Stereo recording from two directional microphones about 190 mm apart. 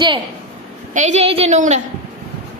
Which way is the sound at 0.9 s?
40° right (ahead or behind).